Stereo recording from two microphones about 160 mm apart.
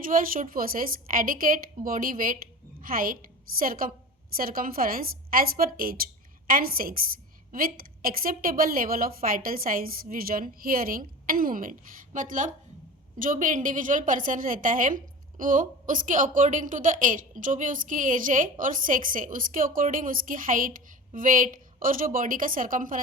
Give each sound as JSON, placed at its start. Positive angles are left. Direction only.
{"t": 0.0, "sound": "a woman's voice", "side_deg": -60}